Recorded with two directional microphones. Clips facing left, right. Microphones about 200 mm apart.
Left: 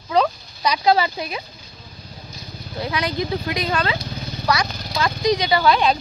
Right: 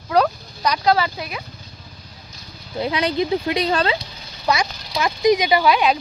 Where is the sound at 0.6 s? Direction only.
10° left (ahead or behind).